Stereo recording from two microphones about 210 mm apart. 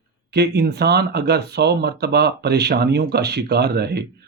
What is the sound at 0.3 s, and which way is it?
Speech, 50° right (ahead or behind).